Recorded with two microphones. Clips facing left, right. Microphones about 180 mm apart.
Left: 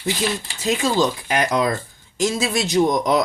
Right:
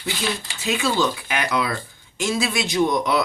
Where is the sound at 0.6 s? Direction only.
40° left (ahead or behind).